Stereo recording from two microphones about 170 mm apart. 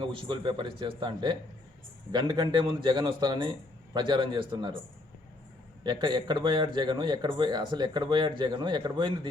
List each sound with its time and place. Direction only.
0.0 s a man's voice: 30° right (ahead or behind)
5.8 s a man's voice: 25° right (ahead or behind)